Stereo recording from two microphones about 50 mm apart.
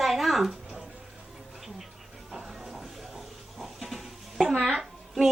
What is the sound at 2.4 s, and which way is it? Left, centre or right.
Music, centre.